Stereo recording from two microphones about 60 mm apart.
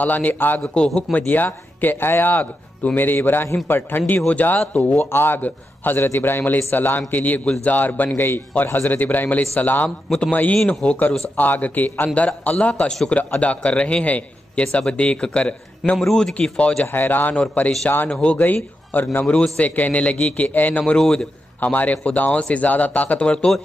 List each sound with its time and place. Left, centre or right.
0.0 s speech: left
0.6 s a man's voice: centre
1.1 s a man's voice: left
5.1 s a man's voice: left
10.7 s a man's voice: centre
16.0 s a man's voice: centre
16.5 s speech: centre
16.8 s a man's voice: left
19.2 s a man's voice: centre
20.8 s a man's voice: centre
21.5 s speech: left